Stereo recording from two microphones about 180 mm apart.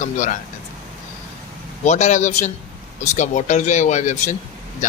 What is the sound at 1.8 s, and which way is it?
Speech, 40° left (ahead or behind).